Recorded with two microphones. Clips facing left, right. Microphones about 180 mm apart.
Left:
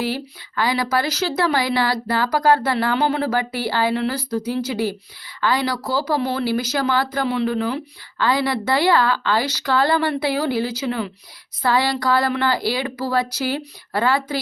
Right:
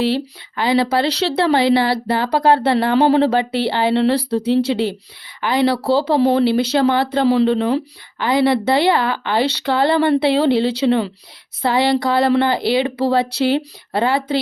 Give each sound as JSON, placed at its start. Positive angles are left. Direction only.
{"t": 0.0, "sound": "speech", "side_deg": -25}